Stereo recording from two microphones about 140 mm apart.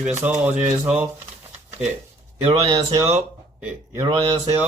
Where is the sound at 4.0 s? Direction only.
35° right (ahead or behind).